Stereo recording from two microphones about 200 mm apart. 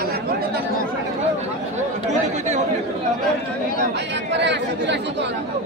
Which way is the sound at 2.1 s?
35° right (ahead or behind).